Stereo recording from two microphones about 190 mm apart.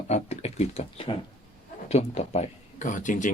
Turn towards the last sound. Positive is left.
turn(degrees=45)  # may be behind; listen again after turning